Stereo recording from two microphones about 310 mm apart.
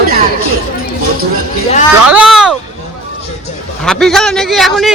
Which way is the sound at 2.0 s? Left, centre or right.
Centre.